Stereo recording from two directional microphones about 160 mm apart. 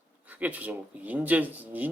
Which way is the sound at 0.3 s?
10° right (ahead or behind).